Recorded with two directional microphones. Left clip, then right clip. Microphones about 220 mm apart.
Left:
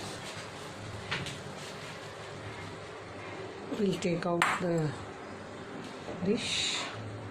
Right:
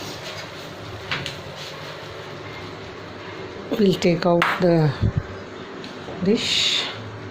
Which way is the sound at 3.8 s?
30° right (ahead or behind).